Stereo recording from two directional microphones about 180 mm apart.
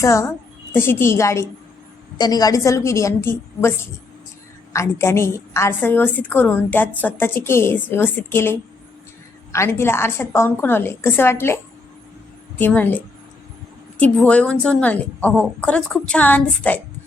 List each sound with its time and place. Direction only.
0.0 s a woman's voice: 15° left (ahead or behind)
14.0 s a woman's voice: 5° left (ahead or behind)